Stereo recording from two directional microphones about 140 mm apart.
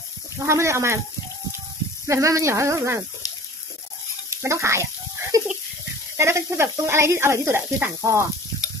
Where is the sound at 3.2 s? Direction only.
25° left (ahead or behind).